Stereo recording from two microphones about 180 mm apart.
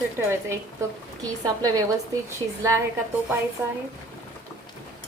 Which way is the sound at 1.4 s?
20° right (ahead or behind).